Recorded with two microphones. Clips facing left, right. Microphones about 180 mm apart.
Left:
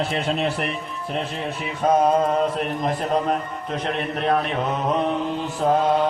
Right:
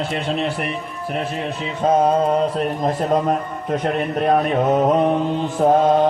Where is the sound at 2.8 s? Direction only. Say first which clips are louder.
Right 4 dB; 40° right (ahead or behind).